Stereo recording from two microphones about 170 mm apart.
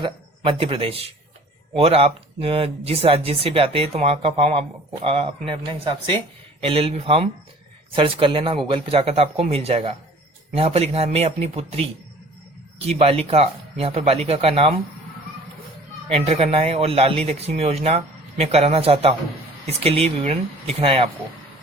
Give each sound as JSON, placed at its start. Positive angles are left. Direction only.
{"t": 0.0, "sound": "a man's voice", "side_deg": -35}
{"t": 12.9, "sound": "speech", "side_deg": -35}
{"t": 16.0, "sound": "speech", "side_deg": -40}